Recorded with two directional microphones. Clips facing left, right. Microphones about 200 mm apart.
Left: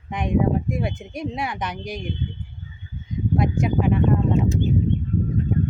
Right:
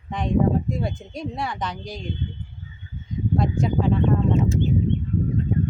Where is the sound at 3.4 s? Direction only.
15° left (ahead or behind).